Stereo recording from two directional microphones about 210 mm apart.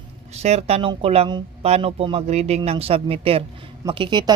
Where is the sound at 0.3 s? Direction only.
30° right (ahead or behind).